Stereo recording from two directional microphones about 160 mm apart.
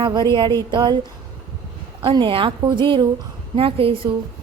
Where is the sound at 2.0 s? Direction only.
30° right (ahead or behind).